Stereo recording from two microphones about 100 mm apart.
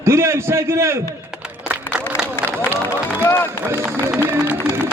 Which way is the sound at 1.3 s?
10° right (ahead or behind).